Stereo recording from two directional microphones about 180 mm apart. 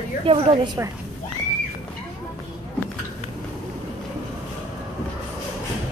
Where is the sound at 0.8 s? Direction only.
15° right (ahead or behind).